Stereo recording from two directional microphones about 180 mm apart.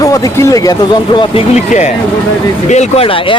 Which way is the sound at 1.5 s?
40° left (ahead or behind).